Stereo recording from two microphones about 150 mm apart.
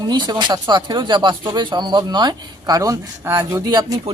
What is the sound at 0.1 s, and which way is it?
Speech, 30° right (ahead or behind).